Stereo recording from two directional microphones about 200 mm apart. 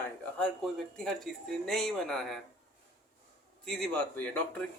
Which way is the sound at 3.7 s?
5° left (ahead or behind).